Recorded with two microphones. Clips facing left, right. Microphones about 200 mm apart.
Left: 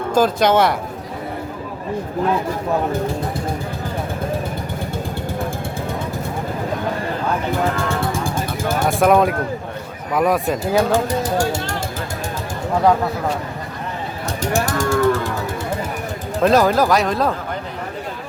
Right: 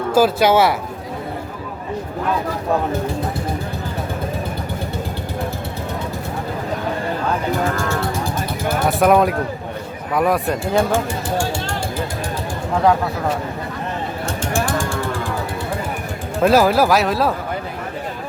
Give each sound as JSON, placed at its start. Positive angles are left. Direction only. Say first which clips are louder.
{"t": 0.1, "sound": "speech", "louder": "right 1 dB", "side_deg": -5}
{"t": 8.9, "sound": "speech", "louder": "even", "side_deg": 0}
{"t": 10.9, "sound": "speech", "louder": "left 2 dB", "side_deg": 40}
{"t": 14.5, "sound": "a sound", "louder": "left 2 dB", "side_deg": 40}
{"t": 16.4, "sound": "speech", "louder": "right 1 dB", "side_deg": -5}